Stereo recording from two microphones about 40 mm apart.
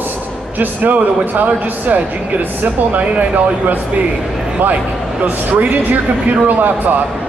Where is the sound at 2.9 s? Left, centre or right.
Right.